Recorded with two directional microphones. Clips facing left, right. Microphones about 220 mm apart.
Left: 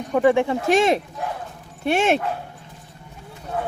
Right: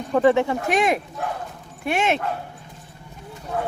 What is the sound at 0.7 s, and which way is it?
Speech, 25° left (ahead or behind).